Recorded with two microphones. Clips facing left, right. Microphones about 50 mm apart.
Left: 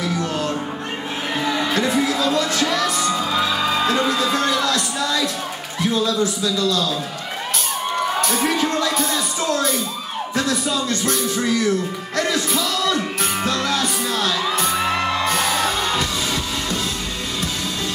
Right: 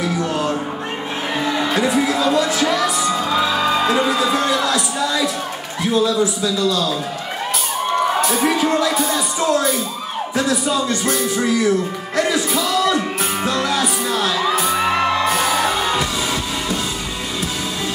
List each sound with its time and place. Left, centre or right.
0.0 s music: centre
5.8 s speech: centre
7.9 s speech: centre
12.2 s music: centre